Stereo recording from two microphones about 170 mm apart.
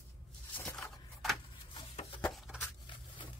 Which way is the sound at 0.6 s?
10° left (ahead or behind).